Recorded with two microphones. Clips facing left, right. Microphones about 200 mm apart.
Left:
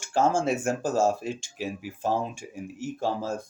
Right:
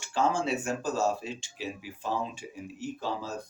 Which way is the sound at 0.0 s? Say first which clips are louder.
Left 4 dB; 50° left (ahead or behind).